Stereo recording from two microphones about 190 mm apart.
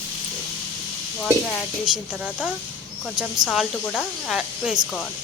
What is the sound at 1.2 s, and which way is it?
Speech, centre (ahead or behind).